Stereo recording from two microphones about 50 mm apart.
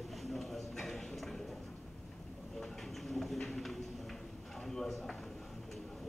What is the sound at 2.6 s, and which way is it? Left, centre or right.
Clip-clop, centre.